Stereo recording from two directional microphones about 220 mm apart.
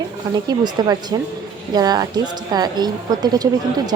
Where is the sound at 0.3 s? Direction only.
20° right (ahead or behind).